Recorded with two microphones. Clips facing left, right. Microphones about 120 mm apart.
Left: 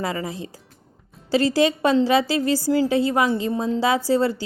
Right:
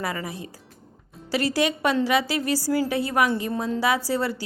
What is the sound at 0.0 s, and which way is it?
A woman's voice, 25° left (ahead or behind).